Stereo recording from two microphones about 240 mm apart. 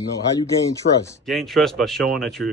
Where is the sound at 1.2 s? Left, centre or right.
Centre.